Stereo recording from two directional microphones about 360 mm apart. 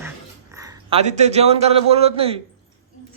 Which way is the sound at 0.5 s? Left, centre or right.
Centre.